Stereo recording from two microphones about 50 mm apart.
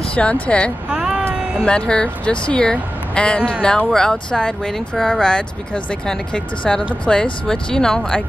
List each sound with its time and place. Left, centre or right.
0.1 s speech: left
0.8 s child singing: centre
1.6 s speech: centre